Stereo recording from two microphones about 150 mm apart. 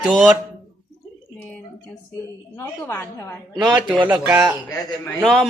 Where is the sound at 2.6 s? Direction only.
15° left (ahead or behind).